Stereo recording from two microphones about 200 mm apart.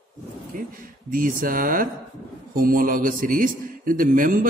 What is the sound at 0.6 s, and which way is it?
Speech, 45° right (ahead or behind).